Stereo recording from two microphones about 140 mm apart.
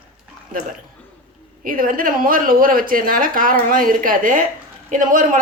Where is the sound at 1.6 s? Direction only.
90° right; by 5.4 s 70° right (ahead or behind).